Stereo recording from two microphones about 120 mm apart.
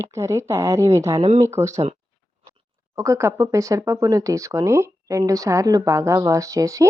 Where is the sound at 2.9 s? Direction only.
25° right (ahead or behind).